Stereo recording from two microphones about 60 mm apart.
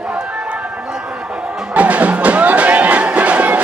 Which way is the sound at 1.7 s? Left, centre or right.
Right.